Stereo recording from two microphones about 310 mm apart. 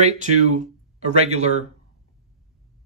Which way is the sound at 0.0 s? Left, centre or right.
Right.